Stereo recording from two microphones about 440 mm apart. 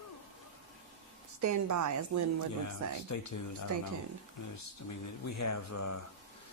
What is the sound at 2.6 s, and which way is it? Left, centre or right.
Speech, left.